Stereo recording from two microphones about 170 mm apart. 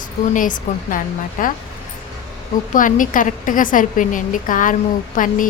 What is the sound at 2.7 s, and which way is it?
A woman's voice, 50° left (ahead or behind).